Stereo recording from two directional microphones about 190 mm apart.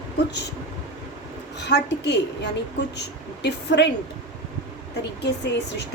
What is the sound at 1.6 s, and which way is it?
A woman's voice, 60° left (ahead or behind).